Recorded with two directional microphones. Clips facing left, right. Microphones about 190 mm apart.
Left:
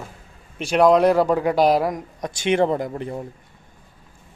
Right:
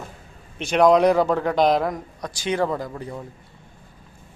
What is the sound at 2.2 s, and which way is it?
Speech, 25° left (ahead or behind).